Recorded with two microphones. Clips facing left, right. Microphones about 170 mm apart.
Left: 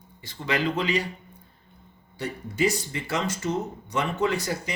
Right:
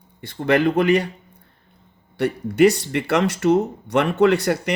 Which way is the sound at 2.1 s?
65° right (ahead or behind).